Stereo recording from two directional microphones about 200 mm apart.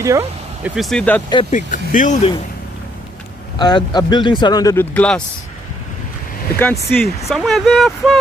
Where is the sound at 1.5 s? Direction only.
40° left (ahead or behind).